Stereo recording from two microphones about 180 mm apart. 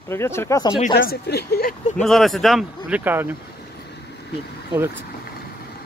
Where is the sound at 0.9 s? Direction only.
65° left (ahead or behind).